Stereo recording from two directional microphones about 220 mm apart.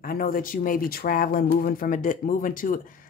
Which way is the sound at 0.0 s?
40° left (ahead or behind).